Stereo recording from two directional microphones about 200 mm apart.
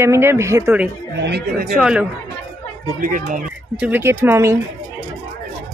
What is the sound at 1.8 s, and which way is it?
Speech, 5° right (ahead or behind).